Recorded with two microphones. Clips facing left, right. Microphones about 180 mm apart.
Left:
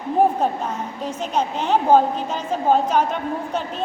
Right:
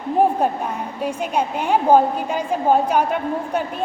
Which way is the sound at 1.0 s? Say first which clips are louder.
Right 2 dB; 10° right (ahead or behind).